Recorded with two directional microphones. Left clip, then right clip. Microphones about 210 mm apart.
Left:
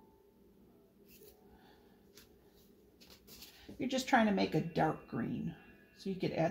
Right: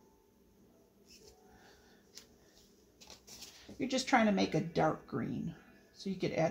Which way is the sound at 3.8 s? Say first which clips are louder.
Right 1 dB; 25° right (ahead or behind).